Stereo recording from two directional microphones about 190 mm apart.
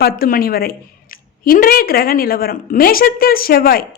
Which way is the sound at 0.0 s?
50° left (ahead or behind).